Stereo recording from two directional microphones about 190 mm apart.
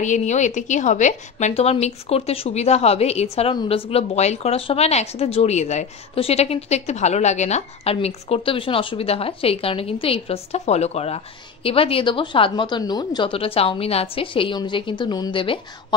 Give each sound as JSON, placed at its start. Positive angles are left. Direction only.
{"t": 0.0, "sound": "speech", "side_deg": 40}